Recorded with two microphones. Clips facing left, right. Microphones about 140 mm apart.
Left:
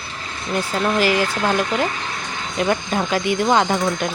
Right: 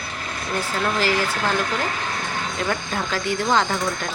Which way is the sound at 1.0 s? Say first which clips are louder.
Left 3 dB; 15° left (ahead or behind).